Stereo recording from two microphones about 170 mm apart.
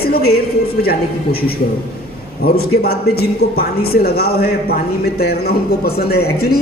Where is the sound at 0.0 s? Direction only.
65° left (ahead or behind).